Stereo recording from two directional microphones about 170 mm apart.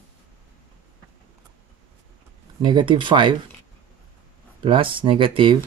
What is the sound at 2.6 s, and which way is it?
Speech, 25° right (ahead or behind).